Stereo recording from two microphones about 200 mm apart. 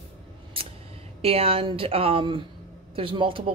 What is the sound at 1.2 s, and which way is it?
Speech, 30° right (ahead or behind).